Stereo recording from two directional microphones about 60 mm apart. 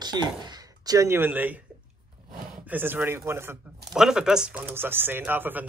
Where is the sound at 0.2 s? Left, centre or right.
Right.